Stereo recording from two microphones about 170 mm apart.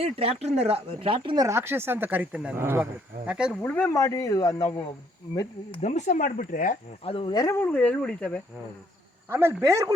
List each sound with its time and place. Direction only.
0.0 s speech: 35° right (ahead or behind)
1.5 s speech: 15° right (ahead or behind)
3.5 s speech: 10° left (ahead or behind)
5.8 s speech: 45° left (ahead or behind)
7.0 s speech: 35° left (ahead or behind); by 8.4 s 5° left (ahead or behind)
9.3 s speech: 15° right (ahead or behind)